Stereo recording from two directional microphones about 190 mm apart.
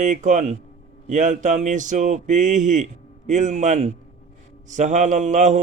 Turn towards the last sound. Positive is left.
turn(degrees=-40)  # may be behind; listen again after turning